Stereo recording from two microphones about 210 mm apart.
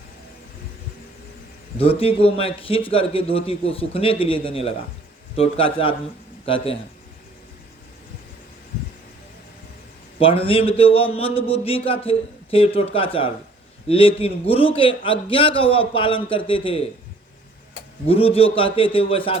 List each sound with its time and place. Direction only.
1.8 s speech: 25° left (ahead or behind)
10.2 s speech: 25° left (ahead or behind)
18.0 s speech: 25° left (ahead or behind)